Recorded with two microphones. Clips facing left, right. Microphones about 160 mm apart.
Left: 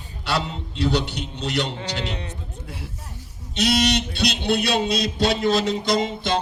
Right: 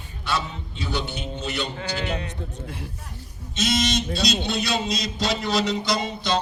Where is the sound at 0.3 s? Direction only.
75° left (ahead or behind).